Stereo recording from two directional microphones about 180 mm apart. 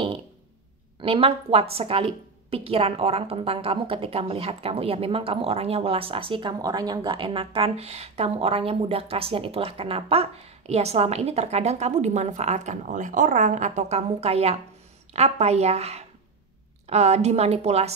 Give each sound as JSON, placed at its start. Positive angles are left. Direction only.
{"t": 1.0, "sound": "a woman's voice", "side_deg": -30}